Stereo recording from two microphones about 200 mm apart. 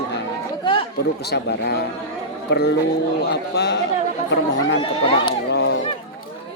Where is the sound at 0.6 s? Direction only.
25° left (ahead or behind).